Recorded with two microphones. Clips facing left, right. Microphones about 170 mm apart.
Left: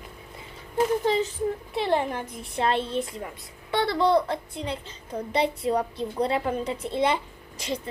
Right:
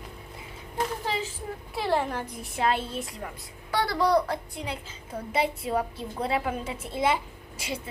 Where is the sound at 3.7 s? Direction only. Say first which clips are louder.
Left 3 dB; 25° left (ahead or behind).